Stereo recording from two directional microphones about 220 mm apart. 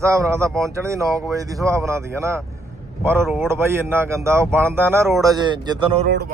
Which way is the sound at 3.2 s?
Centre (ahead or behind).